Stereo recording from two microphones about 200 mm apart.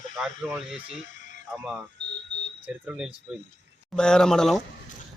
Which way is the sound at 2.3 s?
65° right (ahead or behind).